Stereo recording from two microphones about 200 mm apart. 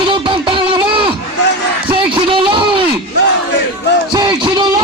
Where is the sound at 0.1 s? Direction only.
25° right (ahead or behind).